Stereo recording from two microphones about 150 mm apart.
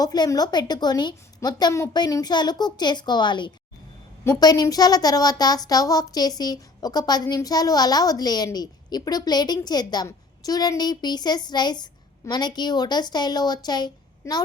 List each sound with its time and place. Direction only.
0.0 s a woman's voice: 25° left (ahead or behind)